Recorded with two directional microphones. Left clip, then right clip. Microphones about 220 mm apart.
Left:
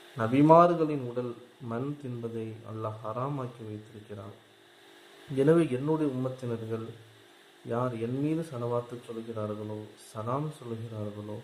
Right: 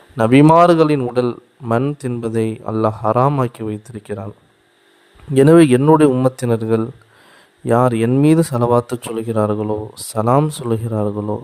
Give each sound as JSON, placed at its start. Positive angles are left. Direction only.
{"t": 0.2, "sound": "a man's voice", "side_deg": -55}
{"t": 5.4, "sound": "a man's voice", "side_deg": -55}